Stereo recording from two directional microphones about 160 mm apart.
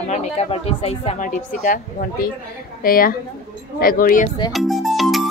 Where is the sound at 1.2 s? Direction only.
55° left (ahead or behind).